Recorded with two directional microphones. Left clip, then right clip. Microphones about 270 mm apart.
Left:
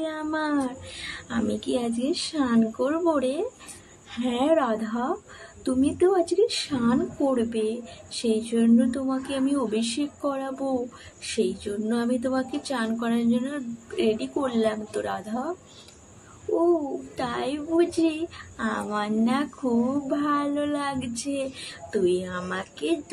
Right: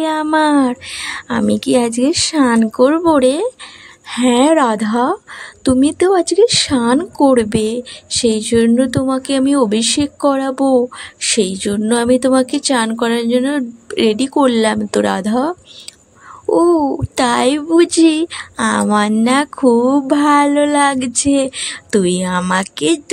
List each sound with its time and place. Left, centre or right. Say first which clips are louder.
0.0 s speech: right 14 dB; right
17.1 s speech: right 16 dB; right